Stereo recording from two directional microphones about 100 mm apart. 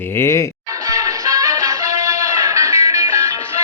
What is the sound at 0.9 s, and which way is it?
Music, 35° right (ahead or behind).